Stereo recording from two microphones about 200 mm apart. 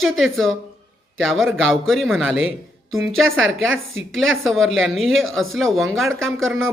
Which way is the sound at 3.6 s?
80° right.